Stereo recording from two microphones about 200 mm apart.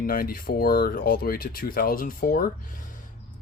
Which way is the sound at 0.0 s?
45° left (ahead or behind).